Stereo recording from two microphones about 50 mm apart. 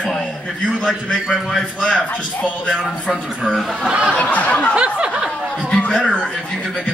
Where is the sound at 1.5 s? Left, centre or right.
Centre.